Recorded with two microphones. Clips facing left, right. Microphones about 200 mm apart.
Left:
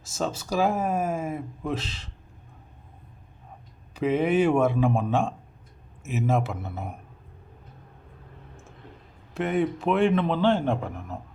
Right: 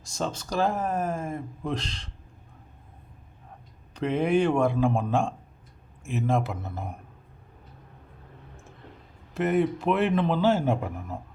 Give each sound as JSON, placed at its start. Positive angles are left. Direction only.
{"t": 0.0, "sound": "speech", "side_deg": 5}
{"t": 3.9, "sound": "a man's voice", "side_deg": 5}
{"t": 9.3, "sound": "a man's voice", "side_deg": 0}